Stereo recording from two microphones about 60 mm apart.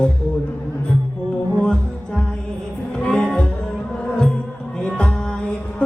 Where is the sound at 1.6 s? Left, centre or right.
Centre.